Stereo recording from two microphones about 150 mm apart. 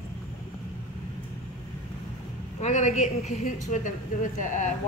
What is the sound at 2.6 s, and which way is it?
Speech, 50° left (ahead or behind).